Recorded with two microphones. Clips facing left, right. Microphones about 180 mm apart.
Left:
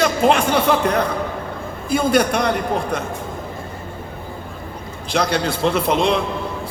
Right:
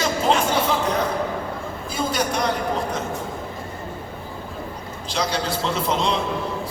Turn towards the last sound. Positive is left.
turn(degrees=60)  # may be behind; listen again after turning